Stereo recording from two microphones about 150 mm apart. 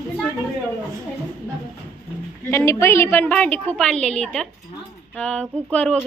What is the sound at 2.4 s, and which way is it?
A woman's voice, 20° left (ahead or behind).